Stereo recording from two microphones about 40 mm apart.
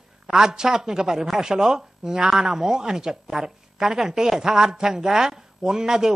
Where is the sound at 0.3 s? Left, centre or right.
Centre.